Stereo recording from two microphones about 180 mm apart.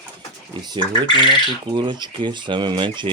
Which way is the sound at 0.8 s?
25° left (ahead or behind).